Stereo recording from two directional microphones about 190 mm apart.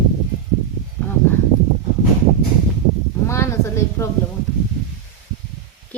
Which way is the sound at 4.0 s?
15° left (ahead or behind).